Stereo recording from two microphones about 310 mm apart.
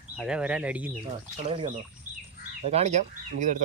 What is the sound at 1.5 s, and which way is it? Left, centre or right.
Speech, right.